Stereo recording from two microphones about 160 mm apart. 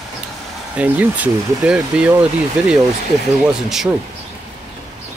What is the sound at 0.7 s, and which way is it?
Speech, 10° right (ahead or behind).